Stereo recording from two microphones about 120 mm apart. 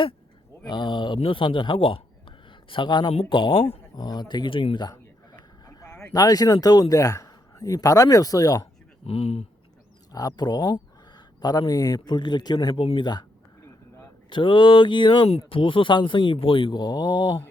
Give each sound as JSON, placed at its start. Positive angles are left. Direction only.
{"t": 0.7, "sound": "speech", "side_deg": 40}
{"t": 3.9, "sound": "speech", "side_deg": 35}
{"t": 5.6, "sound": "vehicle", "side_deg": 25}
{"t": 6.1, "sound": "a man's voice", "side_deg": 30}
{"t": 9.0, "sound": "speech", "side_deg": 55}
{"t": 10.1, "sound": "speech", "side_deg": 30}
{"t": 14.3, "sound": "speech", "side_deg": 45}